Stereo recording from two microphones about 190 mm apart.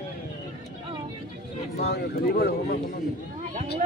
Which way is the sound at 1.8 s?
55° left (ahead or behind).